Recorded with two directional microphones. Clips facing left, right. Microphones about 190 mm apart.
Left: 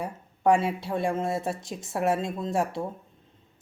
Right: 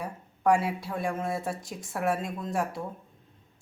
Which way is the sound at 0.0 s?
25° left (ahead or behind).